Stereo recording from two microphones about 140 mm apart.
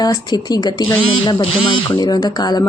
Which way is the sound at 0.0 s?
25° left (ahead or behind).